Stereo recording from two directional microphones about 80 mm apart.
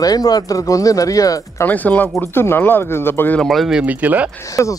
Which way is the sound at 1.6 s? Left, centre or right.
Left.